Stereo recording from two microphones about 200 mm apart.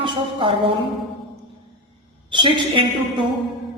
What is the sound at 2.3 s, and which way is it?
Speech, 25° right (ahead or behind).